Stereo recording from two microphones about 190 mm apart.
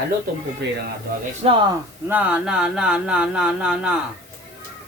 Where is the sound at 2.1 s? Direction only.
5° right (ahead or behind).